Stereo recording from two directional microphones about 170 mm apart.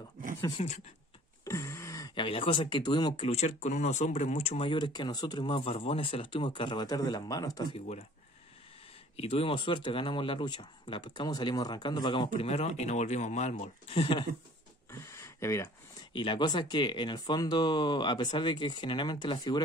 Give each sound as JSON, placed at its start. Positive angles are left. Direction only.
{"t": 0.4, "sound": "speech", "side_deg": 35}
{"t": 1.4, "sound": "speech", "side_deg": 15}
{"t": 3.3, "sound": "speech", "side_deg": 40}
{"t": 9.1, "sound": "speech", "side_deg": 35}
{"t": 14.9, "sound": "a sound", "side_deg": 15}
{"t": 16.1, "sound": "speech", "side_deg": 30}